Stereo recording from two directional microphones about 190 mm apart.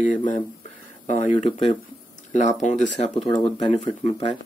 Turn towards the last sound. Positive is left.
turn(degrees=35)  # may be behind; listen again after turning